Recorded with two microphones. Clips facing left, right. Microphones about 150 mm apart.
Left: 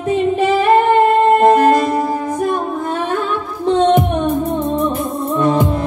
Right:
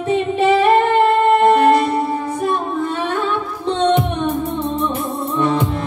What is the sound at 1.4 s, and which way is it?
Music, 45° left (ahead or behind).